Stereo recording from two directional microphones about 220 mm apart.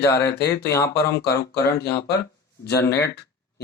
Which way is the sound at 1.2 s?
45° left (ahead or behind).